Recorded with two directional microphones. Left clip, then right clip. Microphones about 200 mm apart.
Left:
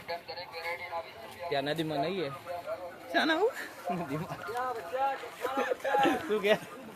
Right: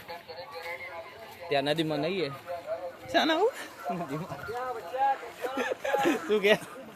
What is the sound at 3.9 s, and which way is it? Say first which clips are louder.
Speech: right 1 dB; centre (ahead or behind).